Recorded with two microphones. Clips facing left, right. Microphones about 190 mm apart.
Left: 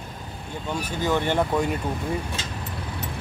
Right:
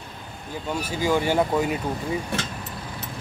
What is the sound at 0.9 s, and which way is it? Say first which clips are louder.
Speech: right 2 dB; 10° right (ahead or behind).